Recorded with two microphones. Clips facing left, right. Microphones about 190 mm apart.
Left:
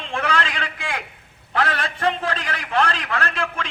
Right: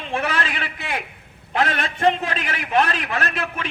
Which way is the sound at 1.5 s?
25° right (ahead or behind).